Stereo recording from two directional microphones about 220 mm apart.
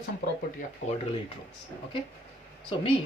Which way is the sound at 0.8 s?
30° left (ahead or behind).